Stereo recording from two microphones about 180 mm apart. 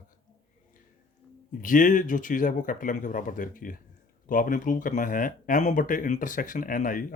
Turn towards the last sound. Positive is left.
turn(degrees=50)  # may be behind; listen again after turning